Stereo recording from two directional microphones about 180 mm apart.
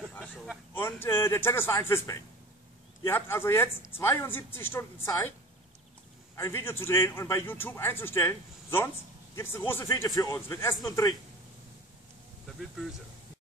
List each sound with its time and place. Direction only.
0.7 s a man's voice: 15° left (ahead or behind)
6.3 s a man's voice: 15° left (ahead or behind)